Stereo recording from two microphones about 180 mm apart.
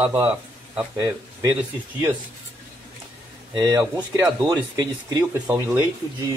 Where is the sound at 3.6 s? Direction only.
20° right (ahead or behind).